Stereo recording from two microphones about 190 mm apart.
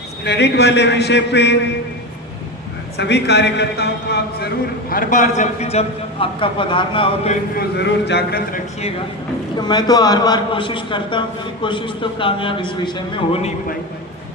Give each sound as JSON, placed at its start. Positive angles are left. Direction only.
{"t": 0.3, "sound": "a man's voice", "side_deg": 60}
{"t": 3.0, "sound": "a man's voice", "side_deg": 65}
{"t": 4.9, "sound": "a man's voice", "side_deg": 45}
{"t": 7.5, "sound": "a man's voice", "side_deg": 65}
{"t": 9.6, "sound": "a man's voice", "side_deg": 20}